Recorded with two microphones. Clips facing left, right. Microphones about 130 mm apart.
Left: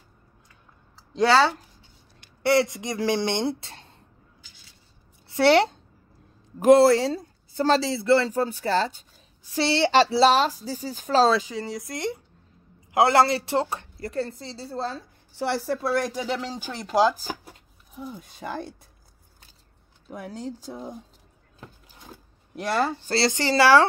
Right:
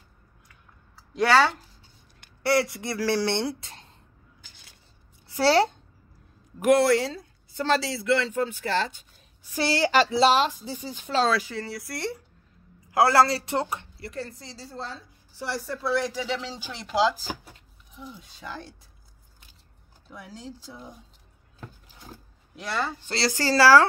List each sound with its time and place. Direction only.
1.1 s speech: 25° left (ahead or behind)
6.6 s speech: 30° left (ahead or behind)
11.3 s speech: 15° left (ahead or behind); by 15.0 s 35° left (ahead or behind)
15.7 s speech: 50° left (ahead or behind)
20.1 s speech: 50° left (ahead or behind)
22.6 s speech: 45° left (ahead or behind)
23.0 s speech: 25° left (ahead or behind)